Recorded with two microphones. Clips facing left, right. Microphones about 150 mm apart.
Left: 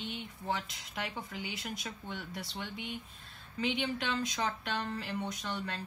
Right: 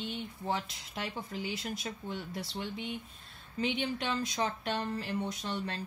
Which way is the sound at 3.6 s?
45° right (ahead or behind).